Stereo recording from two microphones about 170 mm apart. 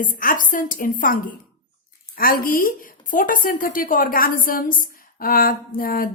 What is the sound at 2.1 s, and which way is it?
A woman's voice, 55° left (ahead or behind).